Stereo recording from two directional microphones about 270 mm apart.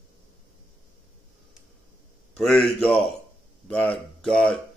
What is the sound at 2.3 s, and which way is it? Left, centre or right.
Mantra, centre.